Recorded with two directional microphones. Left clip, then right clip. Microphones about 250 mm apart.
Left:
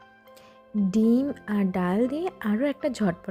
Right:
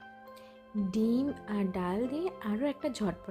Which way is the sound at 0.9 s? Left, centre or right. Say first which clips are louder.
Left 7 dB; left.